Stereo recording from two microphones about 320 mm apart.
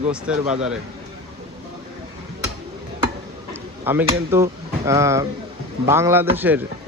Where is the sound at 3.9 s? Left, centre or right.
Centre.